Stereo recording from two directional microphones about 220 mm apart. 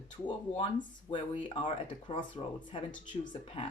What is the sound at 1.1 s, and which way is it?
Speech, 25° left (ahead or behind).